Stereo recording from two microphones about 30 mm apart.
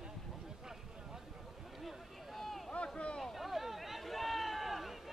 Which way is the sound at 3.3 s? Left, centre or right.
Centre.